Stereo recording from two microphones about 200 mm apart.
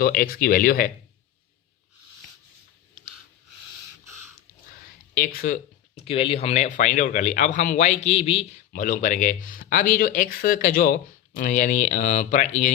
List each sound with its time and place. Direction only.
0.0 s speech: 45° left (ahead or behind)
5.1 s speech: 45° left (ahead or behind)
5.9 s speech: 30° left (ahead or behind)
8.7 s speech: 40° left (ahead or behind)